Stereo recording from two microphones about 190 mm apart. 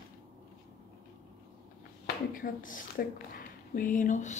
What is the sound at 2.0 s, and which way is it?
Speech, 45° left (ahead or behind).